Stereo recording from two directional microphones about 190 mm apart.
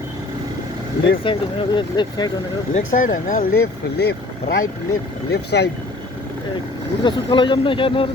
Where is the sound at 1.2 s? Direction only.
25° left (ahead or behind).